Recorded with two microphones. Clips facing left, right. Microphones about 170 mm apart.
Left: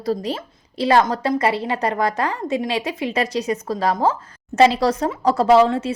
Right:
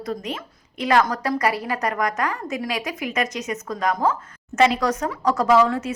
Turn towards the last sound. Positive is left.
turn(degrees=30)  # may be behind; listen again after turning